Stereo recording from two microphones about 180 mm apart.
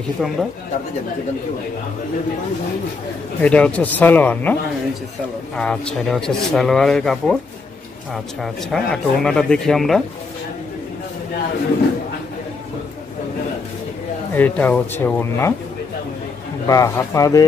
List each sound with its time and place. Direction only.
0.2 s speech: centre (ahead or behind)
3.3 s speech: 5° left (ahead or behind)
5.6 s speech: 5° left (ahead or behind)
14.3 s speech: 10° left (ahead or behind)
16.6 s speech: 15° left (ahead or behind)